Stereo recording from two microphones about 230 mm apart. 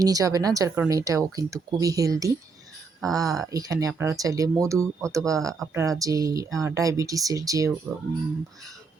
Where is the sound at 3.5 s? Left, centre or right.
Centre.